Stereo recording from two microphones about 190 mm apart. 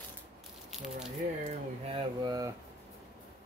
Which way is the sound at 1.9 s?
30° right (ahead or behind).